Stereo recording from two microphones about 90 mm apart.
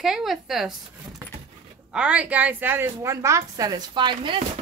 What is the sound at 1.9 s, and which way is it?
A woman's voice, 15° right (ahead or behind).